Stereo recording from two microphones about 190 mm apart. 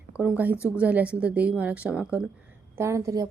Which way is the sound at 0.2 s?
10° right (ahead or behind).